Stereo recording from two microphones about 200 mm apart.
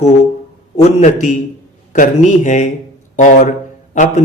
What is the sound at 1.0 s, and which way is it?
Mantra, 35° left (ahead or behind).